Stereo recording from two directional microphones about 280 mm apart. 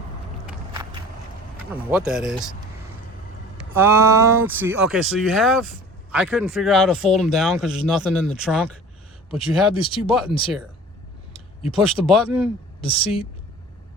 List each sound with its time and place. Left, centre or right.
1.7 s speech: centre
3.6 s speech: centre
9.8 s speech: centre
11.7 s speech: centre
12.8 s speech: centre